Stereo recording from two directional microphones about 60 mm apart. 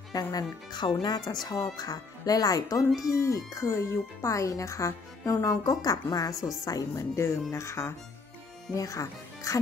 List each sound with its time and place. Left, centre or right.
0.1 s music: left
1.1 s speech: left
3.0 s speech: left
6.6 s speech: left
7.2 s speech: left
8.7 s speech: left